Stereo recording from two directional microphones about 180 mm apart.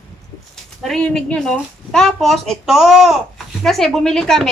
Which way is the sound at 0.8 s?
5° left (ahead or behind).